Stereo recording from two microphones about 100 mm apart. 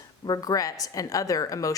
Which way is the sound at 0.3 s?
35° left (ahead or behind).